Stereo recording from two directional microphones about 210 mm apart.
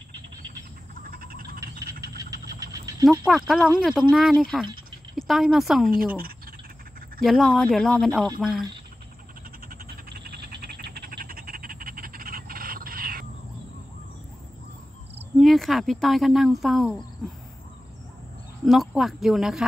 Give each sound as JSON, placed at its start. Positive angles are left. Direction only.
{"t": 1.0, "sound": "a sound", "side_deg": -45}
{"t": 1.6, "sound": "a sound", "side_deg": -15}
{"t": 3.3, "sound": "speech", "side_deg": 0}
{"t": 5.9, "sound": "speech", "side_deg": -45}
{"t": 7.2, "sound": "speech", "side_deg": 0}
{"t": 9.7, "sound": "frog", "side_deg": -45}
{"t": 15.3, "sound": "speech", "side_deg": 0}
{"t": 18.7, "sound": "speech", "side_deg": 0}